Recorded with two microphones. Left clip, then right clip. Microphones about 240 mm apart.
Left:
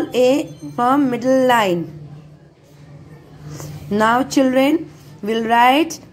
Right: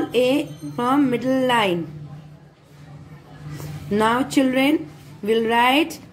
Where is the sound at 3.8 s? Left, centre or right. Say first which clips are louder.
Left 4 dB; centre.